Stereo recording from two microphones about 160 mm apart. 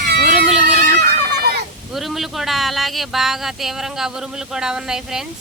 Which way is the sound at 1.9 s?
Centre (ahead or behind).